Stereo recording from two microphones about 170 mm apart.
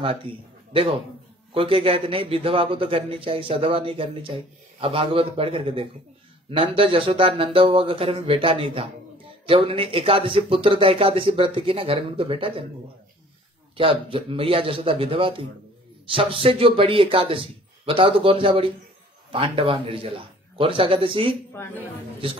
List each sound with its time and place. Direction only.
0.0 s a man's voice: 35° right (ahead or behind)
1.5 s a man's voice: 30° right (ahead or behind)
13.7 s a man's voice: 30° right (ahead or behind)